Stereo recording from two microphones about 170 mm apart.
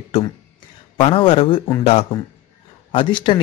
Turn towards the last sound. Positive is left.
turn(degrees=30)  # may be behind; listen again after turning